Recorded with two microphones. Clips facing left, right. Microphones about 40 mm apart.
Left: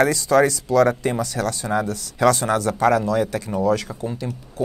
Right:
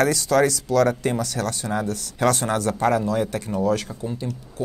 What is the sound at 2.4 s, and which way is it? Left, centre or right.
Speech, left.